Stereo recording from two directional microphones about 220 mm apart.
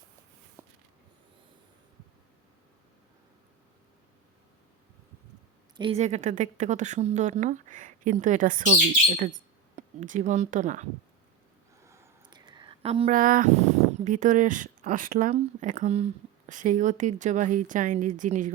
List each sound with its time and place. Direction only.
0.6 s a sound: 10° right (ahead or behind)
5.7 s a woman's voice: 25° right (ahead or behind)
11.8 s a woman's voice: 15° right (ahead or behind); by 18.5 s 35° right (ahead or behind)